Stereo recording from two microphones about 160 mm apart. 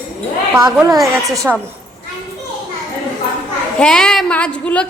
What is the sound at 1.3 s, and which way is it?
Speech, 20° right (ahead or behind).